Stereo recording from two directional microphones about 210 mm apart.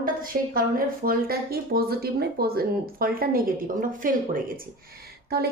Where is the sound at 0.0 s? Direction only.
40° right (ahead or behind).